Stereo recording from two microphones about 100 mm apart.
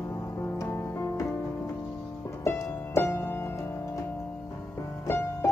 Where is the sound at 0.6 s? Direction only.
25° left (ahead or behind).